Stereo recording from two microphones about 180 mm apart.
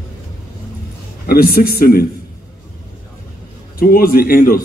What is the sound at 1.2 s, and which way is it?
Speech, 55° left (ahead or behind).